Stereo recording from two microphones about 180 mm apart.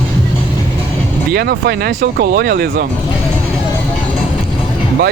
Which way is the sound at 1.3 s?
60° right (ahead or behind).